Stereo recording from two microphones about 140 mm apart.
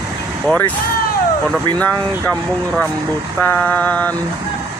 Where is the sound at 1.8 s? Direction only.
10° left (ahead or behind).